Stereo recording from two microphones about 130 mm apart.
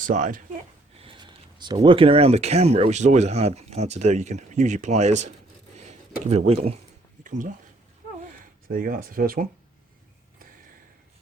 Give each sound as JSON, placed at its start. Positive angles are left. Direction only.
{"t": 0.0, "sound": "speech", "side_deg": -75}
{"t": 0.9, "sound": "speech", "side_deg": -40}
{"t": 5.7, "sound": "a sound", "side_deg": -60}
{"t": 6.3, "sound": "speech", "side_deg": -55}
{"t": 7.3, "sound": "speech", "side_deg": -85}
{"t": 8.7, "sound": "speech", "side_deg": -90}